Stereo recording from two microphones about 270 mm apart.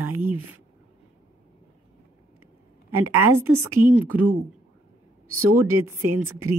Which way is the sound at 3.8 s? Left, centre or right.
Centre.